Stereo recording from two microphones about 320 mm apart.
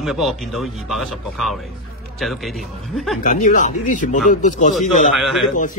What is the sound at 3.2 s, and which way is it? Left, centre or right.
Speech, left.